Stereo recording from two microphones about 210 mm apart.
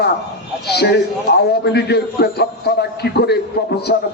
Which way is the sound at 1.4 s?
50° left (ahead or behind).